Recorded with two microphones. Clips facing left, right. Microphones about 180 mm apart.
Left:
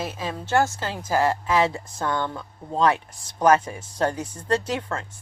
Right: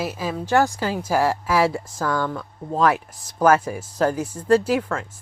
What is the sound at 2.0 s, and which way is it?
Speech, 25° left (ahead or behind).